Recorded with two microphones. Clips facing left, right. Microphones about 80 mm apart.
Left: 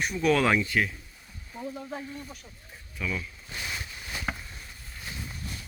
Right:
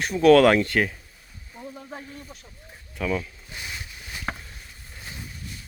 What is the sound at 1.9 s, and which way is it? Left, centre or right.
Speech, centre.